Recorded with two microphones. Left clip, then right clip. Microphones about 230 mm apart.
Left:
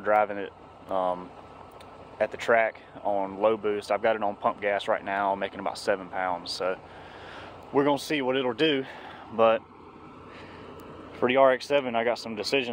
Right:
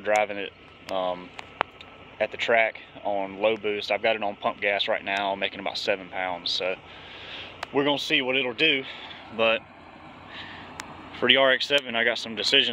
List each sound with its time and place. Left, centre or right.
0.1 s speech: centre
8.5 s speech: left
11.1 s speech: centre